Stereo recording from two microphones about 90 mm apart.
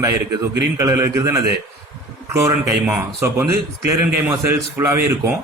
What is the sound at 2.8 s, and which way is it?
A man's voice, 30° right (ahead or behind).